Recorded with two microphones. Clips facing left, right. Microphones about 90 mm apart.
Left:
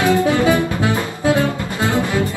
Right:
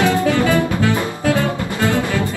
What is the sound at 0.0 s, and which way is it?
Music, 20° left (ahead or behind).